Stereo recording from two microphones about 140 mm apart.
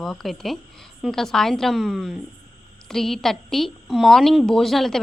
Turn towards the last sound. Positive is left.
turn(degrees=0)  # may be behind; listen again after turning